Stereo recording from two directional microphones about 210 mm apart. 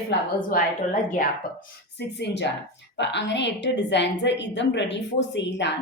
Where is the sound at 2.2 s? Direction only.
55° left (ahead or behind).